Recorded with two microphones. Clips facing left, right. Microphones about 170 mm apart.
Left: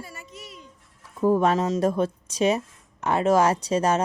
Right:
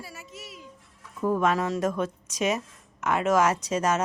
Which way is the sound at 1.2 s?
30° left (ahead or behind).